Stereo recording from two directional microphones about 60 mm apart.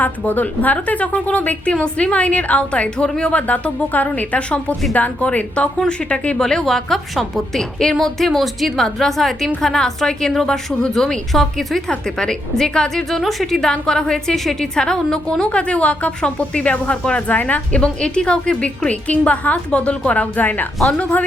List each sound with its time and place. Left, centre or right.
0.0 s a woman's voice: left
20.7 s a woman's voice: centre
21.0 s a woman's voice: left